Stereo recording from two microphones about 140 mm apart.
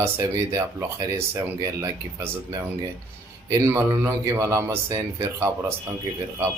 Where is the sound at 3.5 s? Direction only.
20° right (ahead or behind).